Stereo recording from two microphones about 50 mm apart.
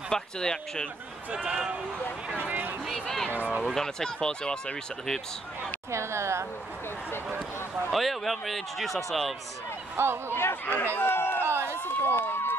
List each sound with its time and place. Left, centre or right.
0.1 s speech: centre
1.3 s a man's voice: right
2.3 s speech: right
2.9 s speech: centre
3.3 s speech: right
3.6 s speech: centre
5.9 s a woman's voice: right
7.9 s speech: centre
10.0 s speech: right
10.3 s speech: left
11.0 s run: left
11.4 s run: right
11.8 s run: left